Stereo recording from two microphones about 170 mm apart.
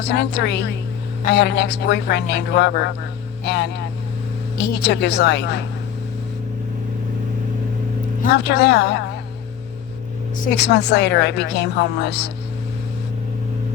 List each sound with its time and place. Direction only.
0.0 s a woman's voice: 85° left
8.4 s a woman's voice: 80° left
10.6 s a woman's voice: 85° left